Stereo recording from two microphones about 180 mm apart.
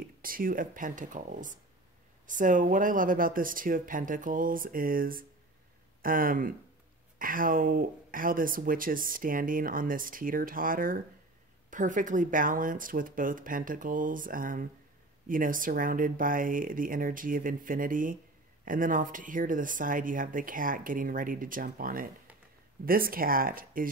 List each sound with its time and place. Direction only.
0.2 s speech: 50° right (ahead or behind)